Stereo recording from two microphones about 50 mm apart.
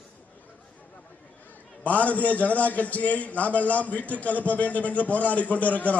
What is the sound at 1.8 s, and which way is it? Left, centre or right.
A man's voice, left.